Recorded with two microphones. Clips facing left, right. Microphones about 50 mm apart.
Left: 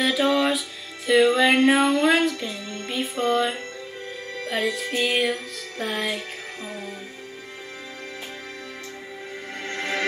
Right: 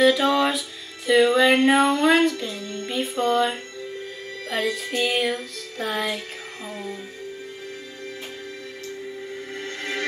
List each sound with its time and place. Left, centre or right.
0.0 s music: centre
9.7 s music: left